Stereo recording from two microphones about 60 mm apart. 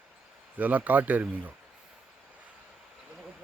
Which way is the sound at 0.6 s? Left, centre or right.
Right.